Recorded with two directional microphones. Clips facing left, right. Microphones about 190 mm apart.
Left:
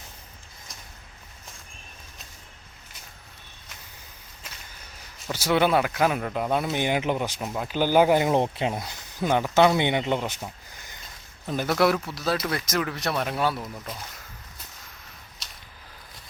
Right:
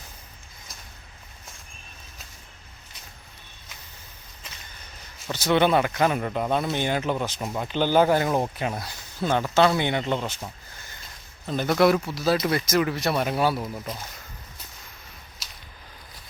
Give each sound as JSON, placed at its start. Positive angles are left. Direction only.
{"t": 5.2, "sound": "speech", "side_deg": 10}
{"t": 7.4, "sound": "speech", "side_deg": 0}